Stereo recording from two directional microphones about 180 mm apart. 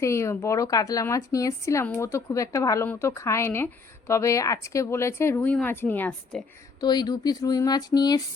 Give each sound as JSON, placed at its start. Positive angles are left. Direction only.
{"t": 0.0, "sound": "speech", "side_deg": 15}
{"t": 6.7, "sound": "speech", "side_deg": 25}